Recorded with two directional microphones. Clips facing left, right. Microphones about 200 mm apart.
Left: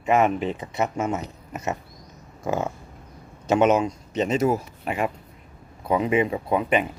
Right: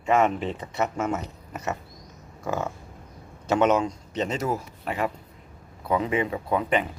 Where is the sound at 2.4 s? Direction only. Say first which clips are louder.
Left 3 dB; 25° left (ahead or behind).